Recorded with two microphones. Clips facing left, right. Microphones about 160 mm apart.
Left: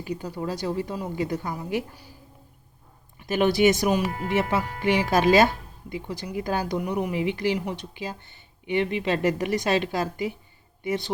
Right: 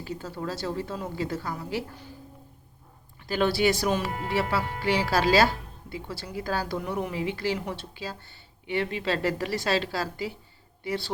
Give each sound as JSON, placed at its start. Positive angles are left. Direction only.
{"t": 0.0, "sound": "speech", "side_deg": 15}
{"t": 3.2, "sound": "a woman's voice", "side_deg": 20}